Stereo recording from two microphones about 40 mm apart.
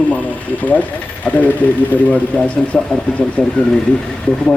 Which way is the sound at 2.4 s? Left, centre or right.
Left.